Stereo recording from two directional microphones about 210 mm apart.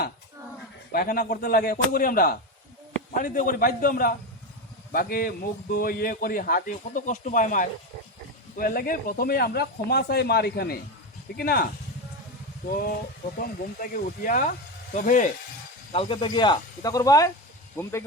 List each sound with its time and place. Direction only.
0.9 s a man's voice: 40° left (ahead or behind)
15.9 s speech: 25° left (ahead or behind)